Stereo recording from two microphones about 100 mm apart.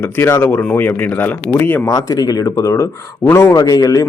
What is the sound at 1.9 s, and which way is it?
A man's voice, 35° left (ahead or behind).